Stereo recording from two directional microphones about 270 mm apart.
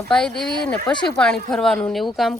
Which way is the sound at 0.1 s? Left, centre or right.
Centre.